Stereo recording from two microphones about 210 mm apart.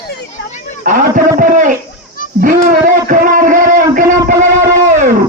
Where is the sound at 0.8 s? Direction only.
40° right (ahead or behind).